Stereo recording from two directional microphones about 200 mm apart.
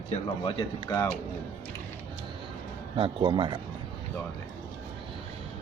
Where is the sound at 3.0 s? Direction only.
25° right (ahead or behind).